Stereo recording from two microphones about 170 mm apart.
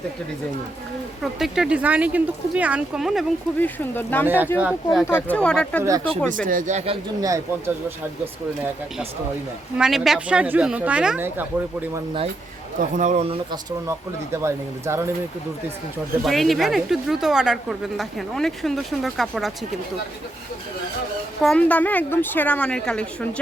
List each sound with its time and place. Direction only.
1.2 s a woman's voice: 5° right (ahead or behind)
3.6 s a woman's voice: 10° left (ahead or behind)
4.6 s a woman's voice: 5° right (ahead or behind)
5.0 s a woman's voice: 10° left (ahead or behind)
6.3 s speech: 50° right (ahead or behind)
7.2 s speech: 20° right (ahead or behind)
9.7 s speech: 5° right (ahead or behind)
12.8 s speech: 45° right (ahead or behind); by 15.1 s 15° right (ahead or behind)
16.2 s a woman's voice: centre (ahead or behind)
21.4 s a woman's voice: 5° left (ahead or behind)